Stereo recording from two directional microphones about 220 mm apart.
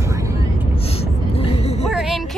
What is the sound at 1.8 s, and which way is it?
Speech, centre (ahead or behind).